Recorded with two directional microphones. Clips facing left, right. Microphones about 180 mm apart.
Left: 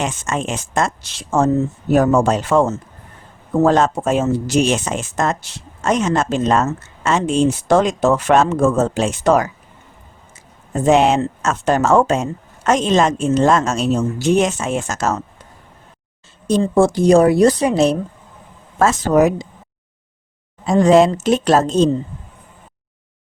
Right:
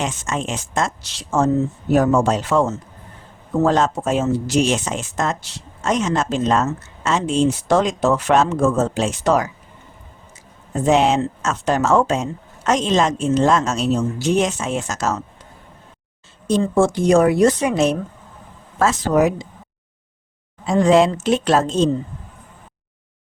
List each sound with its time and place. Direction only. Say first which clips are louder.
0.0 s speech: left 2 dB; 55° left (ahead or behind)
10.8 s speech: left 2 dB; 55° left (ahead or behind)
16.5 s speech: left 2 dB; 35° left (ahead or behind)
18.8 s speech: left 3 dB; 45° left (ahead or behind)
20.7 s speech: left 3 dB; 40° left (ahead or behind)